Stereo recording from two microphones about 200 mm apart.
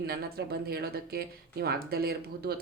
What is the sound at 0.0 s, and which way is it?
Speech, 50° right (ahead or behind).